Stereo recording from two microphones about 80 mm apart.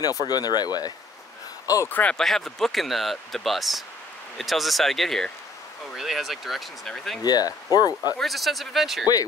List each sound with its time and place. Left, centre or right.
0.0 s speech: left
1.9 s speech: left
2.1 s speech: centre
7.2 s speech: left
8.2 s speech: centre